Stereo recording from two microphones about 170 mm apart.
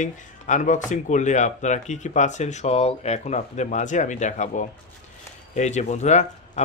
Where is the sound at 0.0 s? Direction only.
45° left (ahead or behind).